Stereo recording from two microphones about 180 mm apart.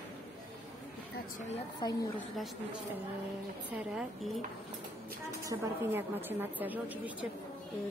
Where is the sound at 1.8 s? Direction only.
25° left (ahead or behind).